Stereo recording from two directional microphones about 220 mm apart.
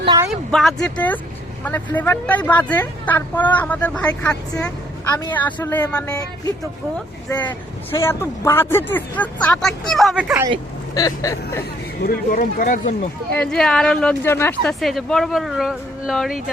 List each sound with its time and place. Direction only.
0.0 s a sound: 20° right (ahead or behind)
0.3 s a woman's voice: centre (ahead or behind)
7.3 s a woman's voice: 10° left (ahead or behind)
10.9 s a woman's voice: 15° left (ahead or behind)
12.0 s speech: 40° left (ahead or behind)
13.3 s speech: 5° left (ahead or behind)